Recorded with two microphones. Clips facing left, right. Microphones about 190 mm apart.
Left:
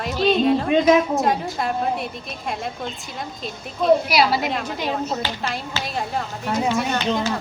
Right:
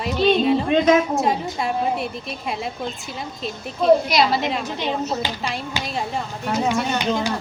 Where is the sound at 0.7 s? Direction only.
5° left (ahead or behind).